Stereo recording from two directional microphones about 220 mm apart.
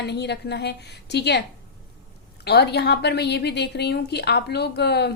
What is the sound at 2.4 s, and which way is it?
Speech, 50° left (ahead or behind).